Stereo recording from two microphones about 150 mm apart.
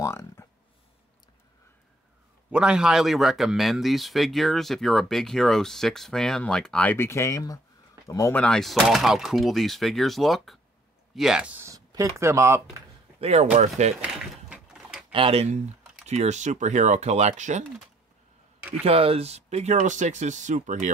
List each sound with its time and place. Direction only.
0.0 s a sound: 20° left (ahead or behind)
2.5 s speech: 5° right (ahead or behind); by 8.4 s 20° left (ahead or behind)
8.4 s speech: 5° left (ahead or behind)
11.6 s speech: 20° right (ahead or behind)
13.2 s speech: 45° right (ahead or behind)
14.0 s a sound: 5° right (ahead or behind)
15.1 s speech: 40° right (ahead or behind)
18.8 s speech: 40° right (ahead or behind); by 20.9 s 55° right (ahead or behind)